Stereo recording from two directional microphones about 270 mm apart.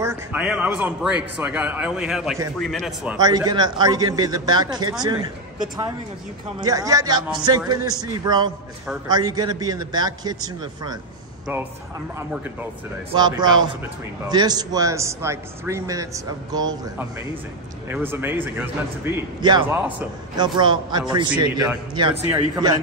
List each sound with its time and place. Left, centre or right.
0.0 s speech: centre
3.2 s a man's voice: centre
6.6 s a man's voice: centre
13.1 s a man's voice: centre